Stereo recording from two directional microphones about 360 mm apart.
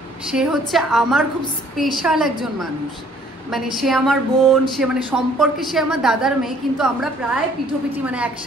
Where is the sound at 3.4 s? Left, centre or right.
Centre.